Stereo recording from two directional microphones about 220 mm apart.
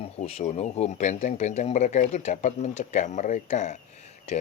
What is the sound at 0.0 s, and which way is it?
Speech, 30° left (ahead or behind).